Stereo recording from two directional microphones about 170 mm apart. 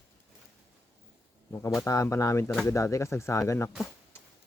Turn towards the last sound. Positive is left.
turn(degrees=15)  # may be behind; listen again after turning